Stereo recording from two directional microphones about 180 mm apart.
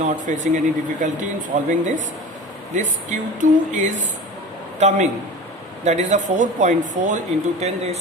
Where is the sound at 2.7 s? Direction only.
45° right (ahead or behind).